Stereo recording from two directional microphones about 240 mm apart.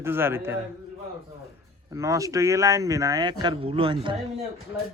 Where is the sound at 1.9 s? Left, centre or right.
Centre.